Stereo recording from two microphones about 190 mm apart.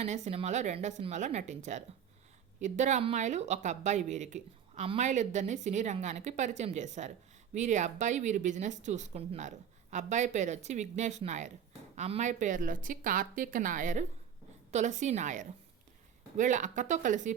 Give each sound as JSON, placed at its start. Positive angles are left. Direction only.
{"t": 0.0, "sound": "speech", "side_deg": -35}